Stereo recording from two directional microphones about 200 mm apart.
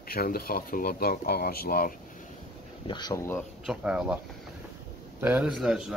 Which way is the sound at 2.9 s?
20° left (ahead or behind).